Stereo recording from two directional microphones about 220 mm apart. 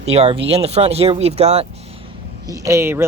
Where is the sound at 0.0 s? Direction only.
30° right (ahead or behind).